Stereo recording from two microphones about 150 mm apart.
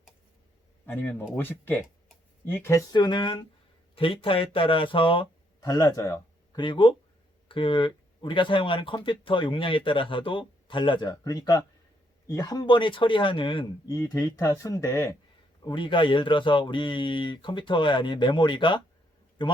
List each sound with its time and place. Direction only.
1.4 s speech: 15° left (ahead or behind); by 13.9 s 35° left (ahead or behind)
13.9 s speech: 25° left (ahead or behind)
15.6 s speech: 35° left (ahead or behind)